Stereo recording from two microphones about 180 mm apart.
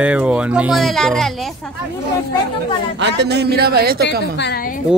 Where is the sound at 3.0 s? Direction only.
70° right (ahead or behind).